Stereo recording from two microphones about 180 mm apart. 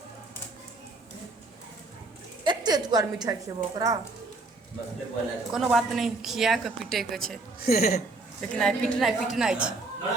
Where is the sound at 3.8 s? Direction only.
20° right (ahead or behind).